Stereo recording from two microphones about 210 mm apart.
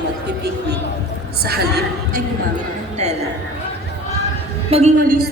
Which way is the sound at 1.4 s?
50° right (ahead or behind).